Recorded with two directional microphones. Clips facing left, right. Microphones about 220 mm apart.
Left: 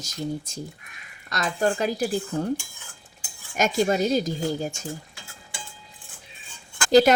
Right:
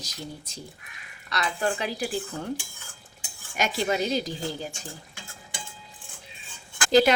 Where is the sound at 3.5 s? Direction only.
45° left (ahead or behind).